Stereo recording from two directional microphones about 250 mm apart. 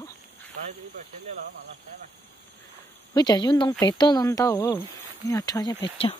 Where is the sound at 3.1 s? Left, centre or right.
Centre.